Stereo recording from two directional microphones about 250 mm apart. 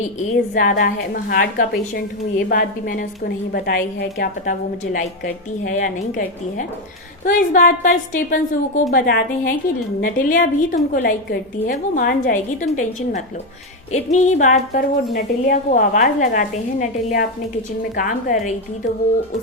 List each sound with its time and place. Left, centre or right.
0.5 s a woman's voice: left